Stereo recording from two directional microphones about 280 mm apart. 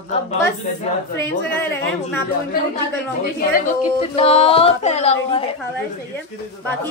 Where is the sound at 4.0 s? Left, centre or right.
Left.